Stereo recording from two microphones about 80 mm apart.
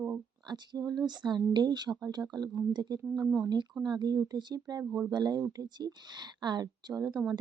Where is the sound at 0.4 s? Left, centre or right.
Right.